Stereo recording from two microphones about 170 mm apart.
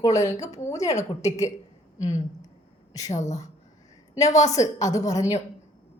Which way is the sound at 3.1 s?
45° left (ahead or behind).